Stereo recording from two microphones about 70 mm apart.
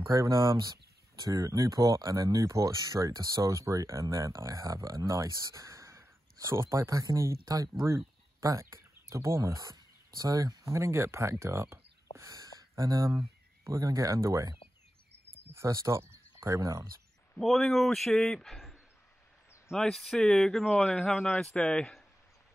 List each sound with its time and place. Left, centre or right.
0.2 s speech: right
3.1 s speech: right
3.4 s speech: right
10.1 s speech: right
10.6 s speech: right
12.3 s a sound: right
13.7 s speech: right
15.6 s speech: right
17.4 s a man's voice: centre
21.5 s speech: centre